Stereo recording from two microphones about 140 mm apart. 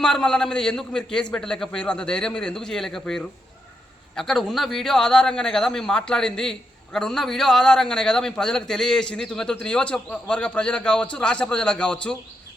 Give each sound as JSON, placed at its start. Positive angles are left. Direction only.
{"t": 0.0, "sound": "a man's voice", "side_deg": 5}